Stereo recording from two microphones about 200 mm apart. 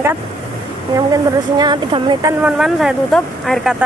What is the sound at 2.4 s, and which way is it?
Speech, 5° right (ahead or behind).